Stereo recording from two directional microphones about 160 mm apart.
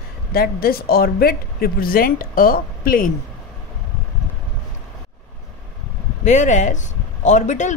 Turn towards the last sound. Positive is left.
turn(degrees=50)  # may be behind; listen again after turning